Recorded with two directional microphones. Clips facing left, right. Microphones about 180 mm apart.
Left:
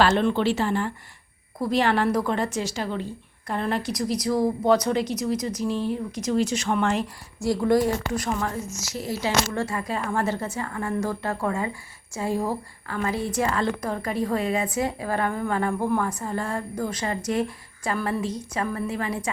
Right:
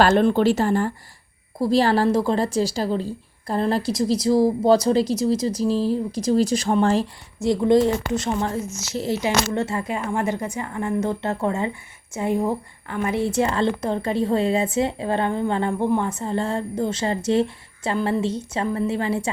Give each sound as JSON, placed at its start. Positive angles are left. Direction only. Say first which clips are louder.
{"t": 0.0, "sound": "a woman's voice", "louder": "right 4 dB", "side_deg": -45}
{"t": 1.5, "sound": "a woman's voice", "louder": "right 4 dB", "side_deg": -30}
{"t": 7.4, "sound": "a woman's voice", "louder": "right 4 dB", "side_deg": -20}